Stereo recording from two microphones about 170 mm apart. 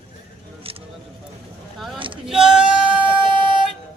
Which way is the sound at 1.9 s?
30° right (ahead or behind).